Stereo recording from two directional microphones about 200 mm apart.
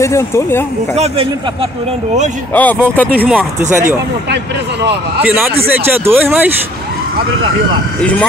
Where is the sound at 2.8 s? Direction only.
10° right (ahead or behind).